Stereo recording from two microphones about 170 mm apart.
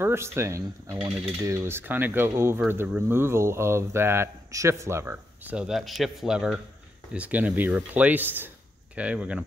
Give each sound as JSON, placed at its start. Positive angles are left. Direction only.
{"t": 0.0, "sound": "speech", "side_deg": -15}